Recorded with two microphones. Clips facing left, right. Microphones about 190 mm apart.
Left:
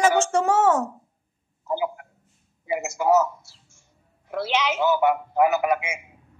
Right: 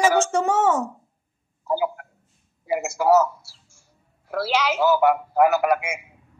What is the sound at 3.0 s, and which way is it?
Speech, 20° left (ahead or behind).